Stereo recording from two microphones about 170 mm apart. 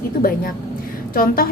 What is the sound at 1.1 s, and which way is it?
Speech, 55° left (ahead or behind).